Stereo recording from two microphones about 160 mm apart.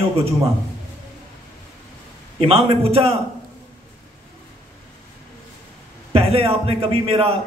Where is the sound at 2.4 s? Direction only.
35° right (ahead or behind).